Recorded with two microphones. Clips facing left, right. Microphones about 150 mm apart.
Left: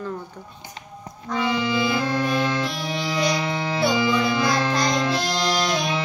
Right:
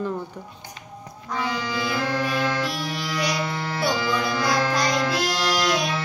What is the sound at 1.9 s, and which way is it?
Music, 20° left (ahead or behind).